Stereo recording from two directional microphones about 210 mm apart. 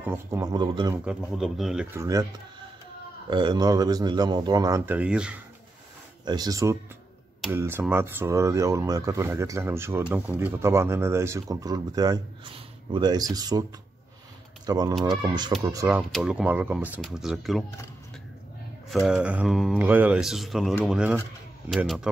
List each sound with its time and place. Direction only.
0.0 s speech: 10° right (ahead or behind)
1.0 s speech: centre (ahead or behind)
2.0 s speech: 15° right (ahead or behind)
3.3 s speech: 20° right (ahead or behind); by 5.4 s 5° right (ahead or behind)
6.2 s speech: 20° right (ahead or behind)
14.7 s speech: 20° right (ahead or behind)
16.1 s speech: centre (ahead or behind)
18.9 s speech: centre (ahead or behind)